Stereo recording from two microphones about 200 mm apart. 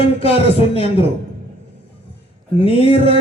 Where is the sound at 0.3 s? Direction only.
30° left (ahead or behind).